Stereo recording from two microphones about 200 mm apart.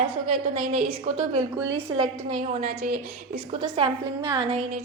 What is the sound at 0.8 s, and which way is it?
Speech, 40° right (ahead or behind).